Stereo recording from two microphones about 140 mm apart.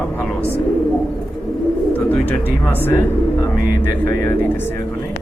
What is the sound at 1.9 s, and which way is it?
Speech, 15° left (ahead or behind).